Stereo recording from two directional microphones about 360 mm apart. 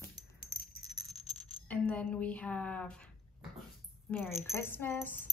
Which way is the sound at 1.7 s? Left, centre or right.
Centre.